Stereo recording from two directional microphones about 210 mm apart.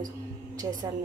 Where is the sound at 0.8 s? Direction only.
15° right (ahead or behind).